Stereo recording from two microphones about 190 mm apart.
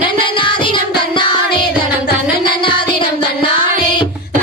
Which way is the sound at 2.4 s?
25° left (ahead or behind).